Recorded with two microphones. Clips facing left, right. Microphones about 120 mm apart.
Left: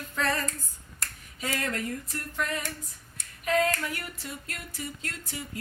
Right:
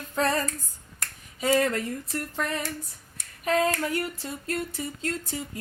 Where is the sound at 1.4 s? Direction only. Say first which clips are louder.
Right 9 dB; 30° right (ahead or behind).